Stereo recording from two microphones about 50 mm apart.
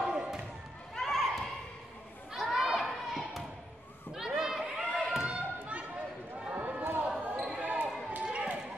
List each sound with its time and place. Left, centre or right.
0.0 s a sound: centre
0.9 s children playing: centre
2.3 s thump: centre
4.1 s a sound: centre
6.5 s run: right
7.1 s basketball bounce: centre
7.6 s basketball bounce: right
8.3 s run: right